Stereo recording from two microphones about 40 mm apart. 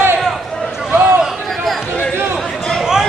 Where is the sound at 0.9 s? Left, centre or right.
Right.